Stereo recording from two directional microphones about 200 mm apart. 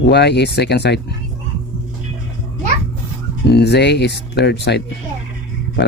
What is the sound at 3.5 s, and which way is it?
Speech, 55° left (ahead or behind).